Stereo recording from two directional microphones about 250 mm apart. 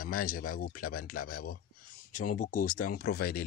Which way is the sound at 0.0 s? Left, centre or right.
Left.